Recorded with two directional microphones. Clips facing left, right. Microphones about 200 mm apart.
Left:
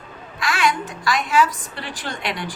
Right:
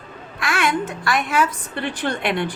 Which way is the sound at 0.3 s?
55° right (ahead or behind).